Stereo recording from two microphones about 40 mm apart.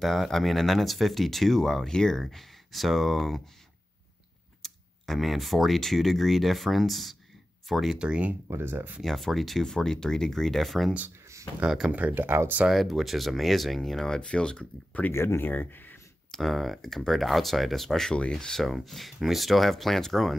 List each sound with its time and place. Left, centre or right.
0.0 s speech: centre
1.9 s speech: centre
2.1 s speech: centre
4.6 s speech: centre
8.5 s speech: right
9.0 s speech: centre
12.1 s speech: right
12.6 s speech: centre
14.2 s speech: left
15.2 s speech: left
16.3 s speech: centre